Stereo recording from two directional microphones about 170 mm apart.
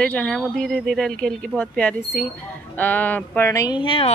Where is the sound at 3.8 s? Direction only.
30° left (ahead or behind).